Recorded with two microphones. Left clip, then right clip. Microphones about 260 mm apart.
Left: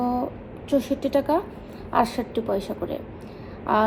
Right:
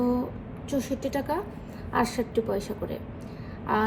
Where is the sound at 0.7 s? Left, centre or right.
Left.